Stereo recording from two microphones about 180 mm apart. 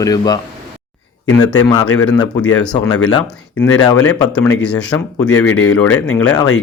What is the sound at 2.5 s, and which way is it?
Speech, 5° left (ahead or behind).